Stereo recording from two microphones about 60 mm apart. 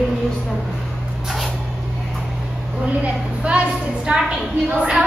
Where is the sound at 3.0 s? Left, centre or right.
Centre.